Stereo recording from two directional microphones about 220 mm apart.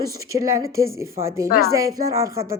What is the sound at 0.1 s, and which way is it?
A woman's voice, 15° right (ahead or behind).